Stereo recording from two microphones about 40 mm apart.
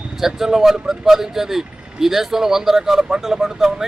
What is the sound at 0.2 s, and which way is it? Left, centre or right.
Speech, centre.